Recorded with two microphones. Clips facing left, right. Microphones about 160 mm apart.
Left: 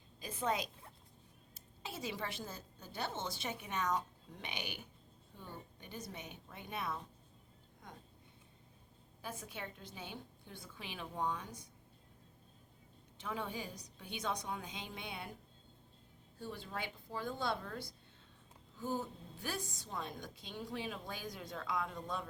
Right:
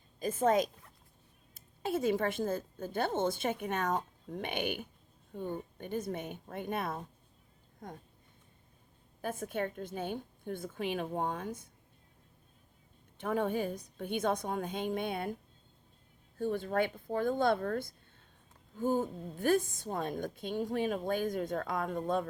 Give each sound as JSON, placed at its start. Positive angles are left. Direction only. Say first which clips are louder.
{"t": 0.2, "sound": "a woman's voice", "louder": "right 10 dB", "side_deg": -50}
{"t": 9.2, "sound": "a woman's voice", "louder": "right 11 dB", "side_deg": -50}
{"t": 13.1, "sound": "a woman's voice", "louder": "right 10 dB", "side_deg": -55}
{"t": 16.4, "sound": "a woman's voice", "louder": "right 13 dB", "side_deg": -55}